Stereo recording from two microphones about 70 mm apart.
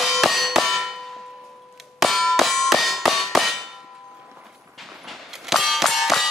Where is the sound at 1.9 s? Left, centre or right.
Centre.